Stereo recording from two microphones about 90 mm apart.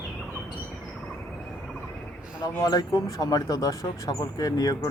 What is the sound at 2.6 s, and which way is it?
Speech, 45° left (ahead or behind).